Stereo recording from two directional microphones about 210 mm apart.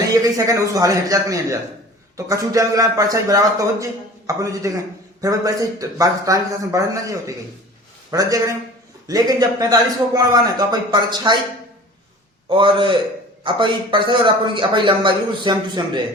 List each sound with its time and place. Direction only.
0.2 s a man's voice: 15° right (ahead or behind)
12.5 s a man's voice: 25° right (ahead or behind)